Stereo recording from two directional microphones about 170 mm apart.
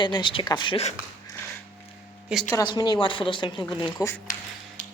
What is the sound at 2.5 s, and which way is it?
Speech, 20° left (ahead or behind).